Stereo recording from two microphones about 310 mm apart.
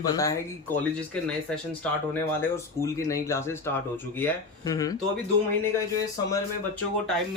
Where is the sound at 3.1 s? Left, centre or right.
Centre.